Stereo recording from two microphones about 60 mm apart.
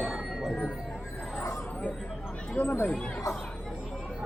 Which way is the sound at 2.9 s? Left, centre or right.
Centre.